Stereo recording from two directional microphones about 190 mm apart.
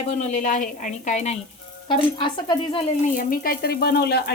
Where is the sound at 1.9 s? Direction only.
25° left (ahead or behind).